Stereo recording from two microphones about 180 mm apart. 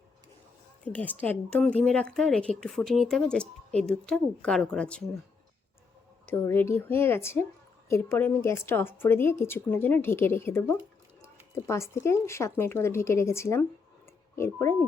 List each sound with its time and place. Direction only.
0.9 s a woman's voice: 10° left (ahead or behind)
6.2 s a woman's voice: 10° left (ahead or behind)